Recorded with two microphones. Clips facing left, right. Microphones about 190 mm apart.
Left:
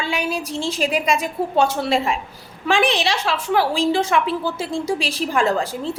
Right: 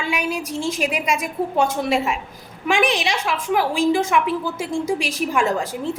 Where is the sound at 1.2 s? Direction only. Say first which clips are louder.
Left 1 dB; 30° left (ahead or behind).